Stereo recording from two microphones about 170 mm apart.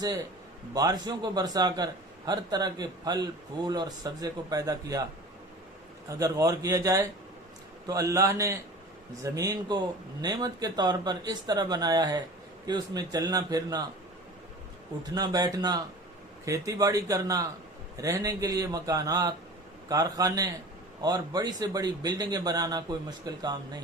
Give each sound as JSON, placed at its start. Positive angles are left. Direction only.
{"t": 0.7, "sound": "a man's voice", "side_deg": -20}
{"t": 6.1, "sound": "a man's voice", "side_deg": -20}
{"t": 15.1, "sound": "a man's voice", "side_deg": -20}